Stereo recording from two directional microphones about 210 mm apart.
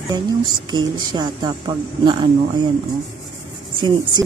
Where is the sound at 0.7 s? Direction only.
20° right (ahead or behind).